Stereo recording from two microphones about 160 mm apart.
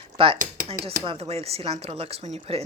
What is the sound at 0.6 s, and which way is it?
Speech, 35° right (ahead or behind).